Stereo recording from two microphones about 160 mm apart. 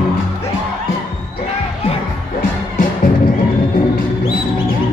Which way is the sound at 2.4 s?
60° left (ahead or behind).